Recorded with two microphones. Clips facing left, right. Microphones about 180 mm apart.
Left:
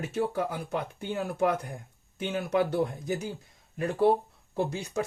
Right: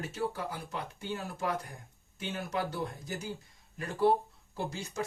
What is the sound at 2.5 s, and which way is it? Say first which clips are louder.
Speech: left 9 dB; 60° left (ahead or behind).